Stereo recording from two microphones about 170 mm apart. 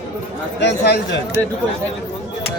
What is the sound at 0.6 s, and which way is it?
Speech, 80° left.